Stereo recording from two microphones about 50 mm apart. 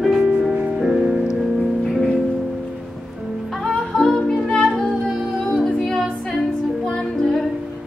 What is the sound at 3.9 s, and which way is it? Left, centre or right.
Music, centre.